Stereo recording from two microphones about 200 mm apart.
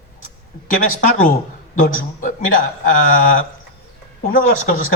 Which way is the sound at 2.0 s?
40° left (ahead or behind).